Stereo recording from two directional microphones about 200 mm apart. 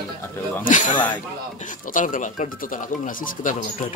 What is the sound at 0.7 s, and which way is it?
Speech, 40° left (ahead or behind).